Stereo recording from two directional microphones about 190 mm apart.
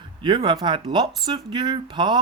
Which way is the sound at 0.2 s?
25° right (ahead or behind).